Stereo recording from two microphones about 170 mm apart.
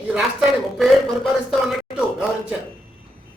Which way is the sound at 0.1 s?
Centre (ahead or behind).